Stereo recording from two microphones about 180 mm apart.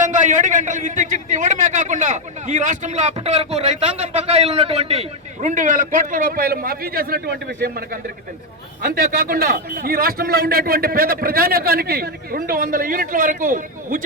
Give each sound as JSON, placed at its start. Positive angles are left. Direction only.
{"t": 0.0, "sound": "a man's voice", "side_deg": -45}